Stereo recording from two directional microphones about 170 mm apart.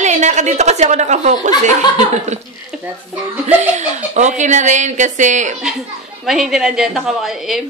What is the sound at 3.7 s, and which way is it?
A woman's voice, 45° right (ahead or behind).